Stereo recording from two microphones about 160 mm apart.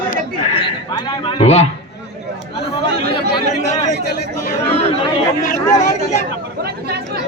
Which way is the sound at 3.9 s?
90° left.